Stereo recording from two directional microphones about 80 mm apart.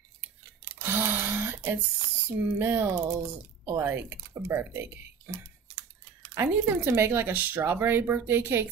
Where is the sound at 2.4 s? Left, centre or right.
Right.